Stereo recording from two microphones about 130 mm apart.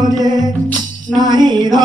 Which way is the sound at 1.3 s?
35° right (ahead or behind).